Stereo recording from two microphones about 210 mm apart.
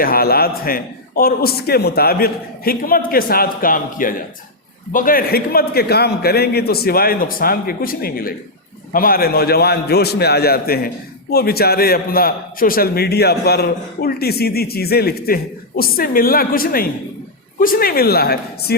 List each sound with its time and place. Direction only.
0.0 s a man's voice: 45° left (ahead or behind)